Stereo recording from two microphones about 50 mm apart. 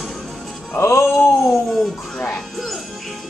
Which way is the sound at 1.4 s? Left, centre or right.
Centre.